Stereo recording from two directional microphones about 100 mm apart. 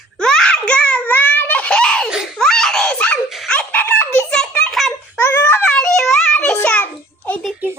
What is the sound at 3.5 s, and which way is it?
Laughter, 15° left (ahead or behind).